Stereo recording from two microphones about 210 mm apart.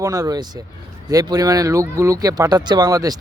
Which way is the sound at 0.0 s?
15° right (ahead or behind).